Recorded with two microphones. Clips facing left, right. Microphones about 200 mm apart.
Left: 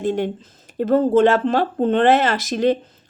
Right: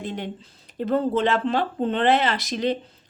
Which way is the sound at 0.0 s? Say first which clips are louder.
Left 10 dB; 45° left (ahead or behind).